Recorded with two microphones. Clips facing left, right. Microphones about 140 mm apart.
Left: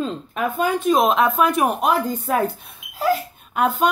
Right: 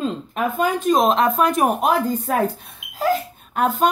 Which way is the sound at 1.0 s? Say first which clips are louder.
Even; 35° right (ahead or behind).